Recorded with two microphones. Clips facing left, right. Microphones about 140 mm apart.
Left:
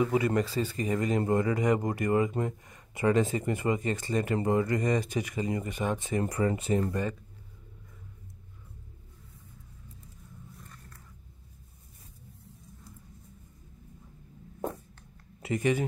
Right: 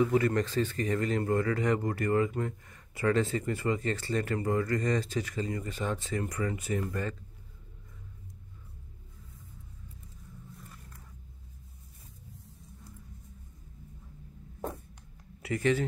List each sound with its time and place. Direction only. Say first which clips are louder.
0.0 s speech: even; 10° left (ahead or behind)
6.2 s speech: left 5 dB; 30° left (ahead or behind)
6.9 s speech: left 3 dB; 15° left (ahead or behind)
15.4 s speech: even; 20° left (ahead or behind)